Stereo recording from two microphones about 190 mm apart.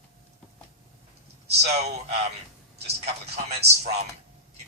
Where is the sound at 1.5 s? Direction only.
35° right (ahead or behind).